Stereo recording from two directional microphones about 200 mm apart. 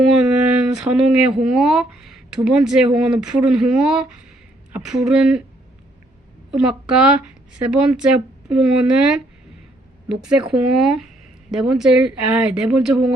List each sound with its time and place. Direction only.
0.0 s speech: centre (ahead or behind)
6.5 s speech: 5° right (ahead or behind)